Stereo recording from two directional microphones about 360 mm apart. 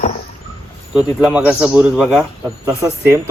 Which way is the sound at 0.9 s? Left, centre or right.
Centre.